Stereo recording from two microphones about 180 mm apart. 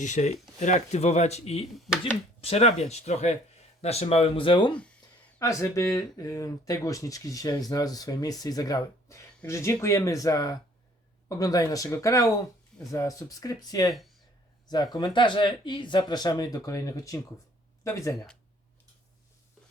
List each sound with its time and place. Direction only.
0.0 s speech: 40° left (ahead or behind); by 13.9 s 20° left (ahead or behind)
13.9 s speech: centre (ahead or behind)
14.7 s speech: 20° left (ahead or behind)